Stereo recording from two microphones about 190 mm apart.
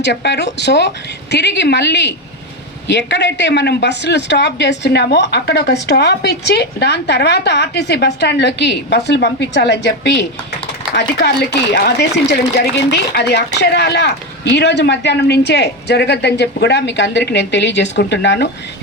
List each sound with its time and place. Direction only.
0.0 s speech: 65° left (ahead or behind)